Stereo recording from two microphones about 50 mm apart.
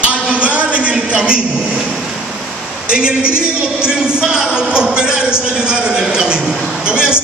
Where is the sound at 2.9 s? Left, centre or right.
Centre.